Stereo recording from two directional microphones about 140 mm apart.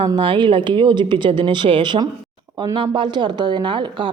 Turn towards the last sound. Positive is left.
turn(degrees=-35)  # may be behind; listen again after turning